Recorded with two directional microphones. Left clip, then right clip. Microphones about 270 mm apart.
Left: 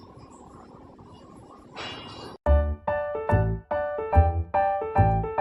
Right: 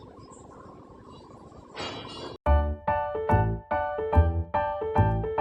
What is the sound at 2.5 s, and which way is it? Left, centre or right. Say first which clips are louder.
Music: left 1 dB; centre.